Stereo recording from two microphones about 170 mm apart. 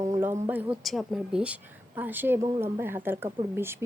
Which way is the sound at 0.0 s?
15° right (ahead or behind).